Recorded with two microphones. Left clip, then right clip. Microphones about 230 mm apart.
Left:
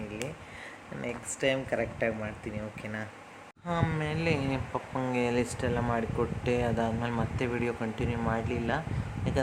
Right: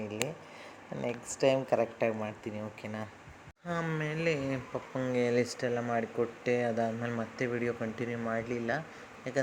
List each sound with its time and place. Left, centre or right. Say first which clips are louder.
1.0 s speech: right 1 dB; centre